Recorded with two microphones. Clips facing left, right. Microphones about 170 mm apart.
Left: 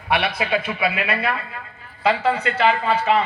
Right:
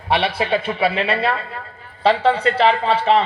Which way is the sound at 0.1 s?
30° right (ahead or behind).